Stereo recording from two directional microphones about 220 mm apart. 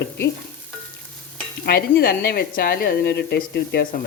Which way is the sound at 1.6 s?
45° left (ahead or behind).